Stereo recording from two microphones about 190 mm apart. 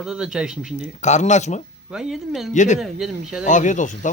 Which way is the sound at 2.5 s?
40° left (ahead or behind).